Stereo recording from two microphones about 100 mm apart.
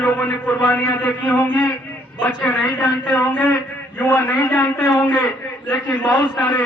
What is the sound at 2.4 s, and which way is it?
A man's voice, 10° left (ahead or behind).